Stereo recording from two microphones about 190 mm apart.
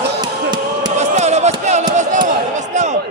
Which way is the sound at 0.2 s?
20° right (ahead or behind).